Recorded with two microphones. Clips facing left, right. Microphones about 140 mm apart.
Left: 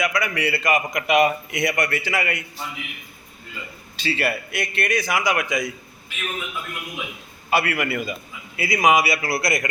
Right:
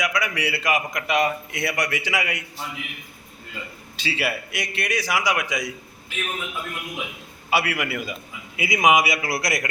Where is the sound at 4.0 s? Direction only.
10° right (ahead or behind).